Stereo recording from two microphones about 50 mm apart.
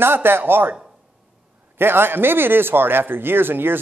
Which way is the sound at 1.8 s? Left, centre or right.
Right.